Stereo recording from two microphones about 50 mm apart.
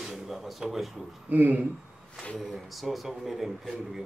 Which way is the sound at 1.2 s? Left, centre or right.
Right.